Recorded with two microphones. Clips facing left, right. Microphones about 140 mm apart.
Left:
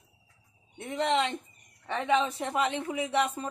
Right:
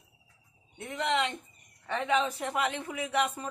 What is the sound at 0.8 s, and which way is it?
A woman's voice, 30° left (ahead or behind).